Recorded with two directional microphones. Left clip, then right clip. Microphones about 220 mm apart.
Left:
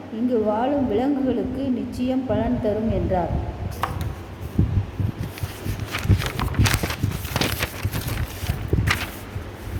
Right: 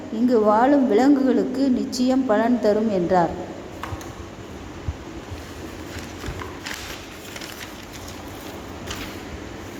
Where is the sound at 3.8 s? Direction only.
45° left (ahead or behind).